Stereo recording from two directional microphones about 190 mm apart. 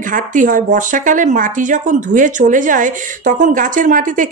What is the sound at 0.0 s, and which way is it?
Speech, 45° right (ahead or behind).